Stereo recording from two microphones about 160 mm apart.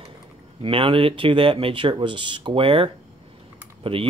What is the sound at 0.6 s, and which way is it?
Speech, 35° right (ahead or behind).